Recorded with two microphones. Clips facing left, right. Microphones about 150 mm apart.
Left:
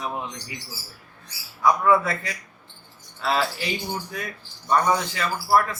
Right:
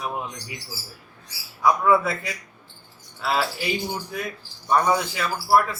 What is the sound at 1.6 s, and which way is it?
A man's voice, 5° right (ahead or behind).